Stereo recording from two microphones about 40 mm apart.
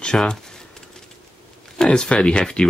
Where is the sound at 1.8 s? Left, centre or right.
Centre.